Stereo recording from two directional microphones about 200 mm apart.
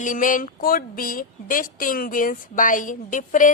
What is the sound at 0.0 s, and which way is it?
A woman's voice, 40° left (ahead or behind).